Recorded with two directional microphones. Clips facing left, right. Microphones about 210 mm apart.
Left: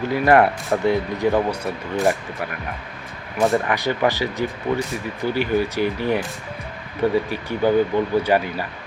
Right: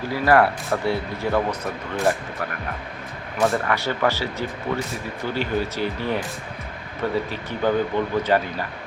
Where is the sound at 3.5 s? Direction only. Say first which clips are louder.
Left 3 dB; 15° left (ahead or behind).